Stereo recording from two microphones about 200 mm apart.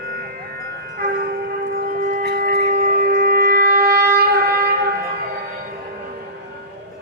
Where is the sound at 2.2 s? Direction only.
55° right (ahead or behind).